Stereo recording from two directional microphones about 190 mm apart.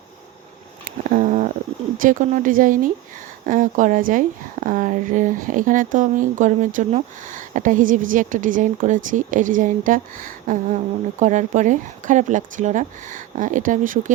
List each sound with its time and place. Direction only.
1.1 s a woman's voice: 45° right (ahead or behind)